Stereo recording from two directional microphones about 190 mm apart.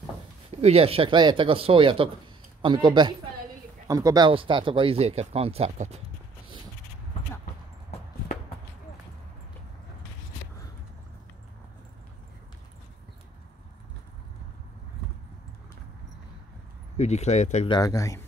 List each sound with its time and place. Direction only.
0.6 s speech: 30° right (ahead or behind)
16.9 s speech: 35° left (ahead or behind)
17.7 s a man's voice: 20° left (ahead or behind)